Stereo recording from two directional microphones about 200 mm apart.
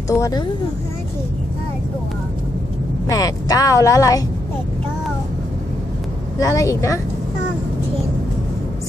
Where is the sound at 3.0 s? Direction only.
20° left (ahead or behind).